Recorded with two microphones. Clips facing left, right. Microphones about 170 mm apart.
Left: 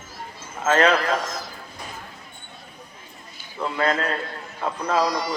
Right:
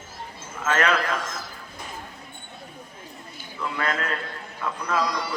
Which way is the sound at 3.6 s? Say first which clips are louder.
Left 5 dB; 30° left (ahead or behind).